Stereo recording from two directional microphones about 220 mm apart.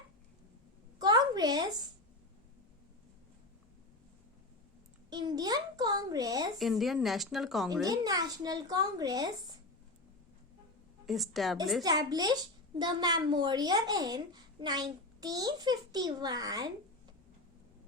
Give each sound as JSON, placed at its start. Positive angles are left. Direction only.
{"t": 0.9, "sound": "a sound", "side_deg": -20}
{"t": 5.1, "sound": "a child's voice", "side_deg": -20}
{"t": 6.6, "sound": "speech", "side_deg": 0}
{"t": 7.9, "sound": "a child's voice", "side_deg": -15}
{"t": 11.0, "sound": "speech", "side_deg": 0}
{"t": 11.8, "sound": "a child's voice", "side_deg": -15}